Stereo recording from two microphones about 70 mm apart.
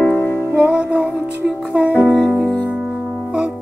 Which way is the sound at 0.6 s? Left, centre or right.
Centre.